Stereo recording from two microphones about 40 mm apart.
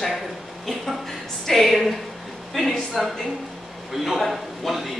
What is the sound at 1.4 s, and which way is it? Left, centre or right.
A man's voice, centre.